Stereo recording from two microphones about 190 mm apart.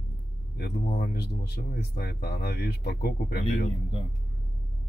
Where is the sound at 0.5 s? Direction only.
60° left (ahead or behind).